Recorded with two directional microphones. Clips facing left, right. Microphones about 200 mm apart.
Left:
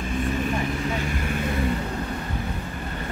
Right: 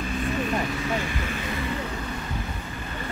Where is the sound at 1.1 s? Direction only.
50° left (ahead or behind).